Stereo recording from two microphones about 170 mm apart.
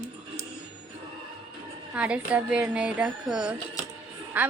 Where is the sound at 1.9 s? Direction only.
5° right (ahead or behind).